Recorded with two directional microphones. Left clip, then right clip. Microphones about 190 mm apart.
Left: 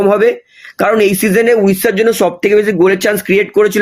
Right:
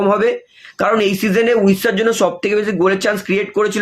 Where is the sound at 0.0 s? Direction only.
40° left (ahead or behind).